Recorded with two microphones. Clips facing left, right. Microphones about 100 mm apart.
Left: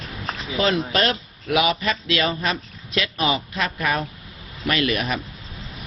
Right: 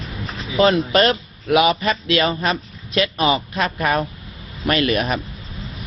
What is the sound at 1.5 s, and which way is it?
A man's voice, 35° right (ahead or behind).